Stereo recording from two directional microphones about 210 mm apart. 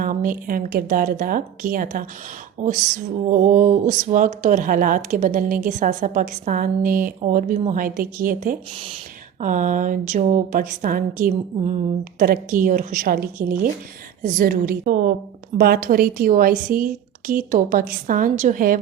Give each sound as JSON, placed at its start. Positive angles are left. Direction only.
{"t": 0.0, "sound": "a woman's voice", "side_deg": -40}